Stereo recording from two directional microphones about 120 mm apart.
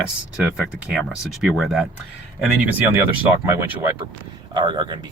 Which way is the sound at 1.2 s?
Centre (ahead or behind).